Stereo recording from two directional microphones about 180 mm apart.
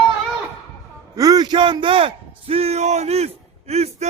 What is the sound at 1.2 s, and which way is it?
A man's voice, 20° right (ahead or behind).